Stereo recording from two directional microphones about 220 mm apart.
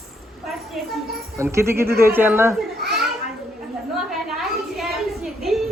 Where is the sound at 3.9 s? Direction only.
Centre (ahead or behind).